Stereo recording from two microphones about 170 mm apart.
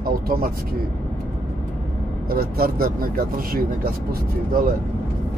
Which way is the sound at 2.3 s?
60° right (ahead or behind).